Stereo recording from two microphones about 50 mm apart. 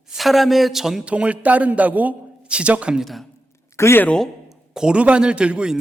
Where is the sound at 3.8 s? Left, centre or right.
Left.